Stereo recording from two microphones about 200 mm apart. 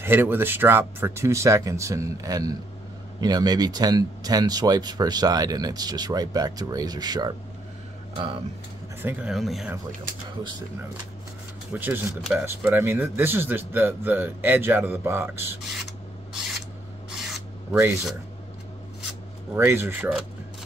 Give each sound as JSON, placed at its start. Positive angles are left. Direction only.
{"t": 0.0, "sound": "speech", "side_deg": -10}
{"t": 9.0, "sound": "speech", "side_deg": -5}
{"t": 11.7, "sound": "speech", "side_deg": -10}
{"t": 17.1, "sound": "rub", "side_deg": 0}
{"t": 19.5, "sound": "speech", "side_deg": -10}